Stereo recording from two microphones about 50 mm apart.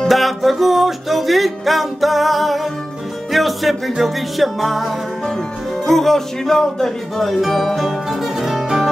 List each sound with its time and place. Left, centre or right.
0.1 s music: centre
5.9 s speech: centre